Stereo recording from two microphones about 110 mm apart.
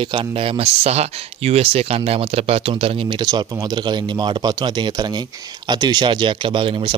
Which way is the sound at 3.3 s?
40° right (ahead or behind).